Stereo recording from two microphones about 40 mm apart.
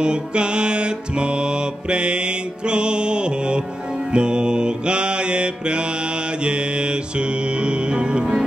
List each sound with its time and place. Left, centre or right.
0.0 s music: right
4.1 s mantra: right
6.4 s music: right